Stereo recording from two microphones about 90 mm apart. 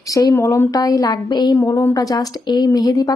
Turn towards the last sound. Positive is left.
turn(degrees=45)  # may be behind; listen again after turning